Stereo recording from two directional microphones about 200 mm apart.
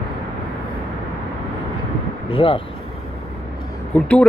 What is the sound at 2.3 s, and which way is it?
Speech, 25° left (ahead or behind).